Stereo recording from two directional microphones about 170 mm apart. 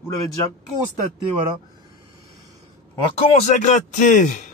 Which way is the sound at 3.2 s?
45° left (ahead or behind).